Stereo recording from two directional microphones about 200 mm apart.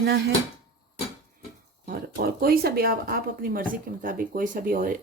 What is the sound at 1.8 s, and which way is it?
Speech, 50° right (ahead or behind).